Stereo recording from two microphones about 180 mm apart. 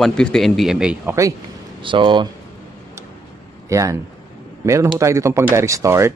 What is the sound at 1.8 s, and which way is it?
Speech, 25° right (ahead or behind).